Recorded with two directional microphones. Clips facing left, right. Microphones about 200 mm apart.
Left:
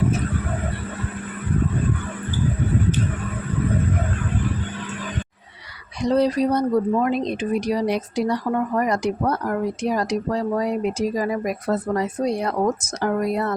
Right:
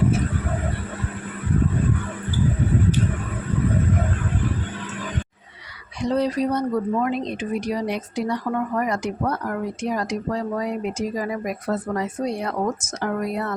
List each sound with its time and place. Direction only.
6.0 s speech: 35° left (ahead or behind)